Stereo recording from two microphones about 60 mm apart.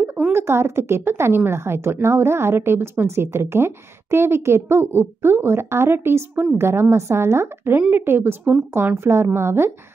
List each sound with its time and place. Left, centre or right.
0.0 s a woman's voice: right